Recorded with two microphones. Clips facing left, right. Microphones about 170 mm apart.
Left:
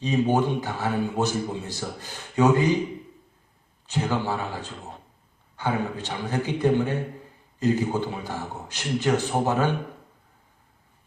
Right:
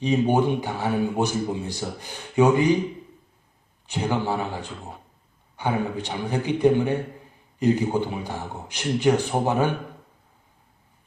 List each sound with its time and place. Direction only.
0.0 s speech: 15° right (ahead or behind)
3.8 s speech: 15° right (ahead or behind)
5.5 s speech: 15° right (ahead or behind)